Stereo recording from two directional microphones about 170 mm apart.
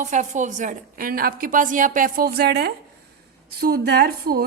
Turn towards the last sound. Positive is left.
turn(degrees=-65)  # may be behind; listen again after turning